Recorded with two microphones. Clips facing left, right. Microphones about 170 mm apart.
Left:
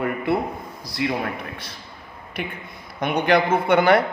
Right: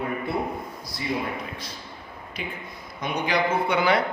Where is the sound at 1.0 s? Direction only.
75° left (ahead or behind).